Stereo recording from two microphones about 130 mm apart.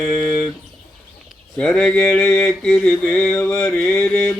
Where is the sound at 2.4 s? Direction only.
5° left (ahead or behind).